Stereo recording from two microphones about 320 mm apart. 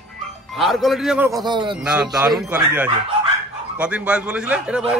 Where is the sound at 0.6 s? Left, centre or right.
Centre.